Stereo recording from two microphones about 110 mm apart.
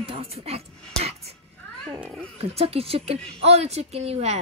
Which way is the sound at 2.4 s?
65° right (ahead or behind).